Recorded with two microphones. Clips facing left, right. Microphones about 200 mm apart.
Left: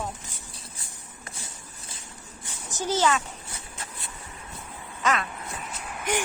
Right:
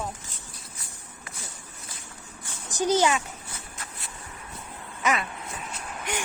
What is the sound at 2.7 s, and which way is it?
Speech, 15° right (ahead or behind).